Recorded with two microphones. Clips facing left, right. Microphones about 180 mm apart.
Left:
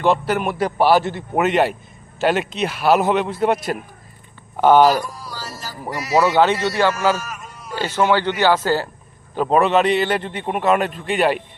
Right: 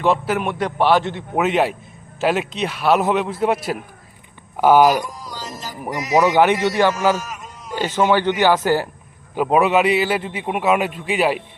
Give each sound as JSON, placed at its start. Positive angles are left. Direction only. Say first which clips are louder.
{"t": 0.0, "sound": "a man's voice", "louder": "left 1 dB", "side_deg": 0}